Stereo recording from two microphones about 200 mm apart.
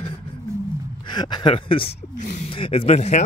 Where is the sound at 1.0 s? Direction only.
20° left (ahead or behind).